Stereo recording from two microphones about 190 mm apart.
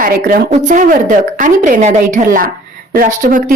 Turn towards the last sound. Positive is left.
turn(degrees=-45)  # may be behind; listen again after turning